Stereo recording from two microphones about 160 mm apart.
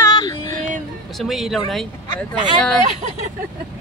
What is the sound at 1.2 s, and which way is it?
Speech, centre (ahead or behind).